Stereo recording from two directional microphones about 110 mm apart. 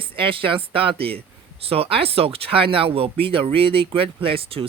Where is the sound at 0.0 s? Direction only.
50° right (ahead or behind).